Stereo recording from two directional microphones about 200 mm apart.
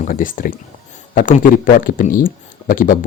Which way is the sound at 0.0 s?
40° left (ahead or behind).